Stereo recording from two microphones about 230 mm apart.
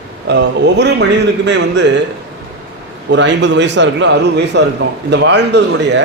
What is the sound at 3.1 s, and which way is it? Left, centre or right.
A man's voice, right.